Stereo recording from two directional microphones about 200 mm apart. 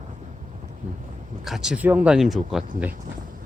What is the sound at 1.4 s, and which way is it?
Speech, centre (ahead or behind).